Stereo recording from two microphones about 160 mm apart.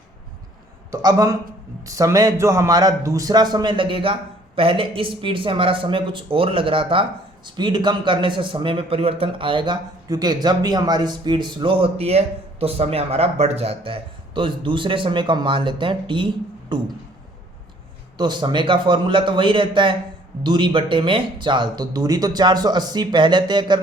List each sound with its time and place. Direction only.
0.9 s a man's voice: 20° right (ahead or behind)
18.2 s a man's voice: 30° right (ahead or behind)